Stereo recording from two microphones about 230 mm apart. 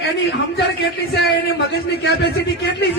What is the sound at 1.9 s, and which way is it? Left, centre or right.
Speech, left.